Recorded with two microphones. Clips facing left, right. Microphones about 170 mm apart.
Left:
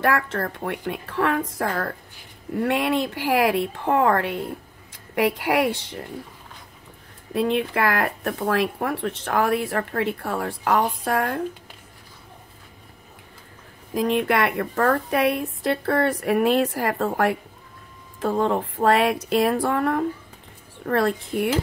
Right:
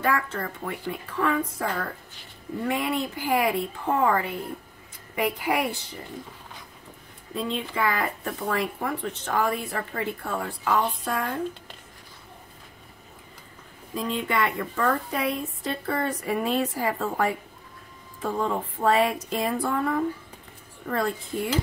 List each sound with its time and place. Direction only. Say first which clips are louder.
0.0 s a woman's voice: left 4 dB; 70° left (ahead or behind)
7.3 s a woman's voice: left 7 dB; 70° left (ahead or behind)
13.9 s a woman's voice: left 6 dB; 70° left (ahead or behind)
21.3 s a woman's voice: left 5 dB; 75° left (ahead or behind)